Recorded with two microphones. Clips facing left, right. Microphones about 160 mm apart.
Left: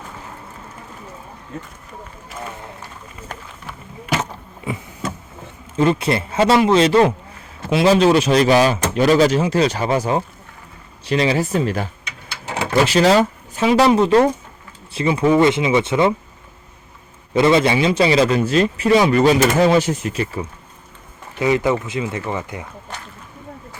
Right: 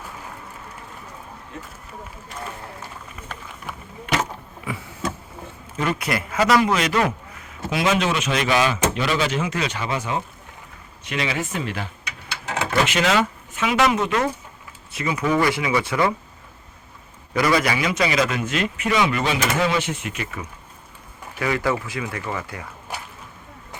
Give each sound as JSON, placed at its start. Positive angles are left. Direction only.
{"t": 2.3, "sound": "vehicle", "side_deg": 5}
{"t": 4.0, "sound": "vehicle", "side_deg": 0}
{"t": 4.7, "sound": "a man's voice", "side_deg": 25}
{"t": 12.5, "sound": "a man's voice", "side_deg": 30}
{"t": 17.3, "sound": "a man's voice", "side_deg": 25}
{"t": 21.3, "sound": "a man's voice", "side_deg": 20}
{"t": 22.9, "sound": "a sound", "side_deg": -10}